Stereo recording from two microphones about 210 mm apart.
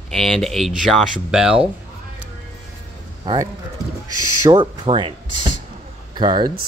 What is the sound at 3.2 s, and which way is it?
Speech, 20° right (ahead or behind).